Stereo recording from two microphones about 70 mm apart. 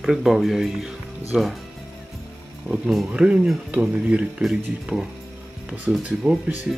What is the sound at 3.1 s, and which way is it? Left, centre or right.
Speech, centre.